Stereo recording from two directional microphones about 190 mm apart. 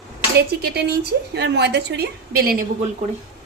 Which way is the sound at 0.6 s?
60° right (ahead or behind).